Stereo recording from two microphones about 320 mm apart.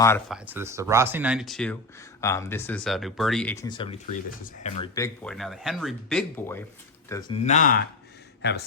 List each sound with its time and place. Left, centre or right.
0.0 s speech: centre
0.3 s speech: centre
7.1 s speech: centre; by 8.6 s left